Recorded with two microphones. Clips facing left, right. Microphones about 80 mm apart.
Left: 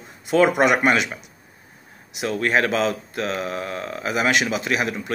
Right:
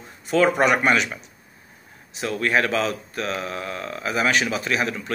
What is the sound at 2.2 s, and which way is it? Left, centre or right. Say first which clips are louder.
Speech: left 1 dB; left.